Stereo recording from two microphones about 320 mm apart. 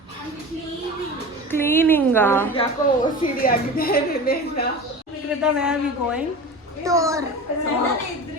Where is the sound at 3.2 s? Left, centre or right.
Left.